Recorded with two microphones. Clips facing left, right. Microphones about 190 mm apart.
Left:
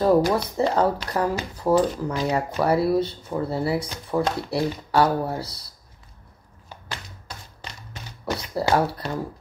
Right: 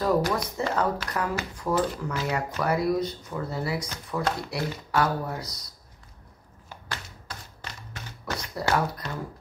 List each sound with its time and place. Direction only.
0.0 s speech: 30° left (ahead or behind)
6.9 s a sound: 15° left (ahead or behind)
8.5 s speech: 30° left (ahead or behind)